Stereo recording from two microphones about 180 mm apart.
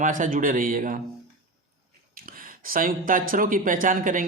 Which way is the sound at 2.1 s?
50° right (ahead or behind).